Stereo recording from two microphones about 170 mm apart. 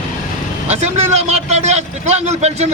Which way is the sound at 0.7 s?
40° right (ahead or behind).